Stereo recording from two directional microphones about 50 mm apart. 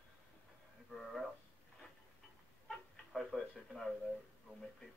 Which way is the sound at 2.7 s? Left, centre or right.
Centre.